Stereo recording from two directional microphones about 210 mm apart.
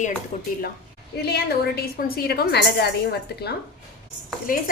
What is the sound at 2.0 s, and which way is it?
A woman's voice, 45° left (ahead or behind).